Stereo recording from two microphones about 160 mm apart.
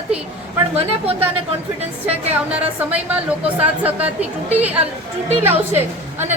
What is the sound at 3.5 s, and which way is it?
A woman's voice, 10° right (ahead or behind).